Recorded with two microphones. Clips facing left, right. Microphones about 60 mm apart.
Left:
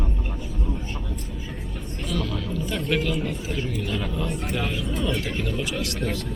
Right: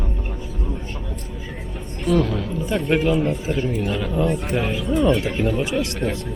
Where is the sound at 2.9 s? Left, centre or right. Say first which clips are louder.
Right 7 dB; right.